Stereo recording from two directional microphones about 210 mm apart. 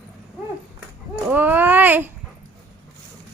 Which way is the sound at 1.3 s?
10° right (ahead or behind).